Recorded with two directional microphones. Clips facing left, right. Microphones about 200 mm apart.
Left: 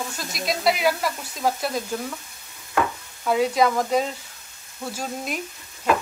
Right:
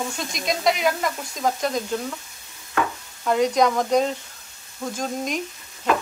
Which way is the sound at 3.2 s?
5° left (ahead or behind).